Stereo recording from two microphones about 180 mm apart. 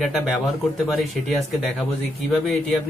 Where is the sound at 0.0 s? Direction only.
Centre (ahead or behind).